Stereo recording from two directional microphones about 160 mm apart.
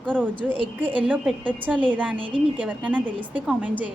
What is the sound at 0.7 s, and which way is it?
A woman's voice, 10° right (ahead or behind).